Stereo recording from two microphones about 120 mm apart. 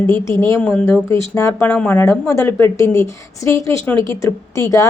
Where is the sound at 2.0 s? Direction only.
25° left (ahead or behind).